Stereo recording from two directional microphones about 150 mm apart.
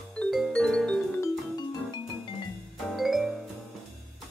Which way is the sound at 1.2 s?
25° left (ahead or behind).